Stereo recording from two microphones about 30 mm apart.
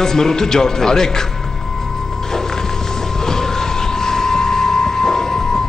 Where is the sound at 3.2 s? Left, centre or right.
Centre.